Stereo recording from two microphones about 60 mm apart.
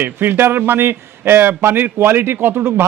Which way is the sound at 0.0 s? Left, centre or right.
Right.